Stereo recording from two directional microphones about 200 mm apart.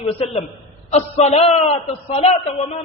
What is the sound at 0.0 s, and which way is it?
A man's voice, 30° left (ahead or behind).